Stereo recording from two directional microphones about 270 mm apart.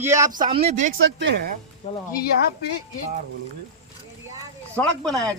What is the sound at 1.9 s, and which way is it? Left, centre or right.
Speech, left.